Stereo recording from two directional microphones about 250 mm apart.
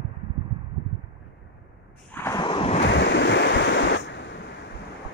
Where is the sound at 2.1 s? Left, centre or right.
Centre.